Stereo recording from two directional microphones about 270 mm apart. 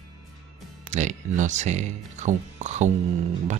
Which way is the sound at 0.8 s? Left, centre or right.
Right.